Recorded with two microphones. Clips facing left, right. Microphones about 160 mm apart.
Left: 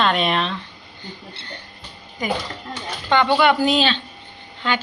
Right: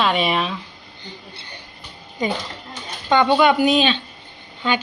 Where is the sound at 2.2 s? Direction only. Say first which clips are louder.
Right 1 dB; 25° right (ahead or behind).